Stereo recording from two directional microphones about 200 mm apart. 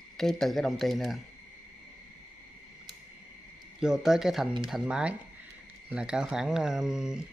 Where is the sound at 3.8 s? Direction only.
5° right (ahead or behind).